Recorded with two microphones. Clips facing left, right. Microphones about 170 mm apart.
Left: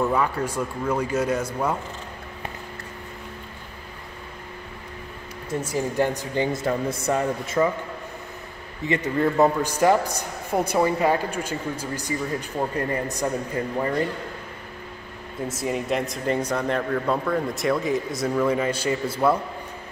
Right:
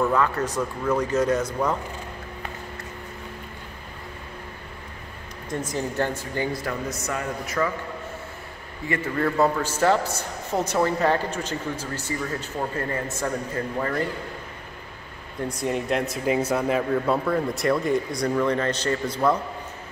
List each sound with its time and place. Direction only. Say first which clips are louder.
0.0 s a man's voice: right 1 dB; 10° left (ahead or behind)
5.5 s speech: left 2 dB; 10° left (ahead or behind); by 7.7 s 25° left (ahead or behind)
8.8 s a man's voice: left 3 dB; 20° left (ahead or behind)
15.4 s speech: right 1 dB; centre (ahead or behind)